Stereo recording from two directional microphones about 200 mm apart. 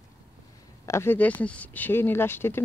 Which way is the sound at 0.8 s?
15° left (ahead or behind).